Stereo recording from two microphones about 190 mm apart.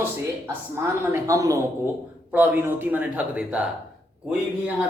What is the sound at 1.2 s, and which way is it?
Speech, 15° right (ahead or behind).